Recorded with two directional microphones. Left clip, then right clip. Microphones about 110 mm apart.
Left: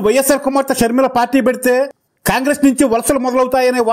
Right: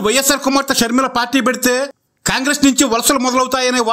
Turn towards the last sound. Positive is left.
turn(degrees=25)  # may be behind; listen again after turning